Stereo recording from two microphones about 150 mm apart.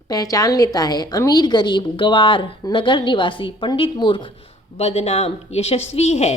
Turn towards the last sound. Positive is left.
turn(degrees=45)  # may be behind; listen again after turning